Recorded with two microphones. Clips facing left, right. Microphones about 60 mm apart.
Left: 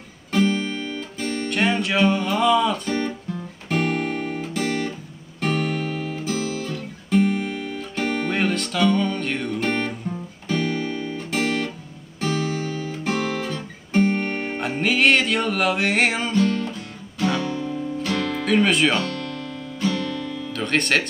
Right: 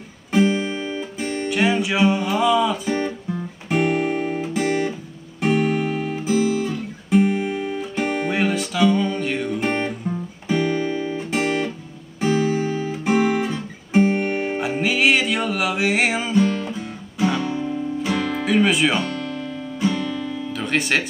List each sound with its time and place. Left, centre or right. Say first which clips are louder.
0.3 s music: right 2 dB; centre
5.4 s guitar: right 4 dB; centre
12.2 s music: right 5 dB; centre
12.9 s guitar: right 6 dB; centre